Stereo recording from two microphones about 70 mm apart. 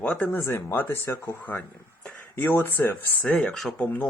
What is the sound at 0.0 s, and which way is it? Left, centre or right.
Speech, centre.